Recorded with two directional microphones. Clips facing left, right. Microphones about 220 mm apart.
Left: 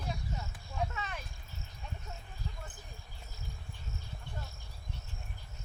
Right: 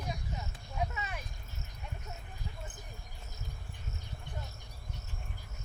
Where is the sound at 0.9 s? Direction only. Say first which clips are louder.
Even; 10° right (ahead or behind).